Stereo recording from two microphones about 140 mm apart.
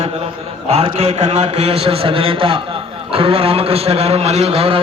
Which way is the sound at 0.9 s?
45° right (ahead or behind).